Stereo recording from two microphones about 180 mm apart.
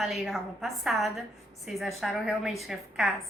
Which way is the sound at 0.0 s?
Centre (ahead or behind).